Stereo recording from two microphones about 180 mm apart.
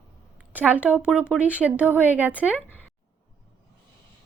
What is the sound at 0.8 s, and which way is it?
Speech, 10° left (ahead or behind).